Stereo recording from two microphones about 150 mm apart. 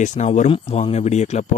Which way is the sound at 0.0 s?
55° left (ahead or behind).